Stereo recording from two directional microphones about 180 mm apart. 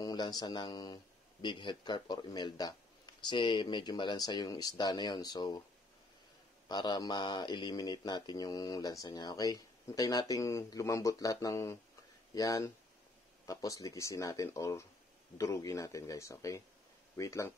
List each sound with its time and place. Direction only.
0.0 s speech: 20° left (ahead or behind)
6.7 s speech: 25° left (ahead or behind)